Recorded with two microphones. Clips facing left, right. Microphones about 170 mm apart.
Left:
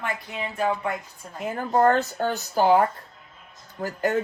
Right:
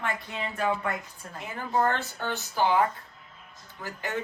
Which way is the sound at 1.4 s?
45° left (ahead or behind).